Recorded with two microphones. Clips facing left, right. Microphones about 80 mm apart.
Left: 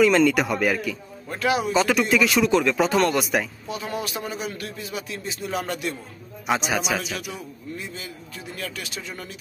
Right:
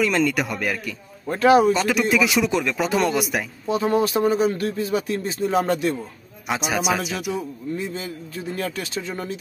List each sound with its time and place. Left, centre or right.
0.0 s speech: centre
1.2 s a man's voice: right
1.7 s speech: centre
3.6 s a man's voice: right
6.4 s a man's voice: centre
7.3 s a man's voice: right